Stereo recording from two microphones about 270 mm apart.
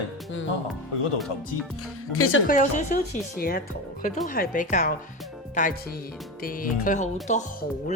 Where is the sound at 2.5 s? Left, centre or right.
Left.